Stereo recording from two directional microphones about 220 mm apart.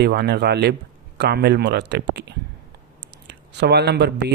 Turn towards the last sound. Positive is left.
turn(degrees=-50)  # may be behind; listen again after turning